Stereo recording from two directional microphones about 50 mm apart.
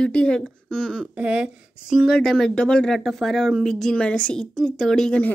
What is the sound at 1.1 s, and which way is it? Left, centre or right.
Speech, right.